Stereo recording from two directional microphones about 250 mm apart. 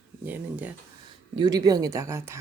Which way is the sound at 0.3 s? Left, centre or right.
Centre.